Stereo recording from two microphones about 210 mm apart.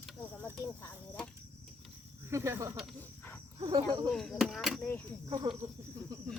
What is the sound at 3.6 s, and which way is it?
Speech, 20° right (ahead or behind).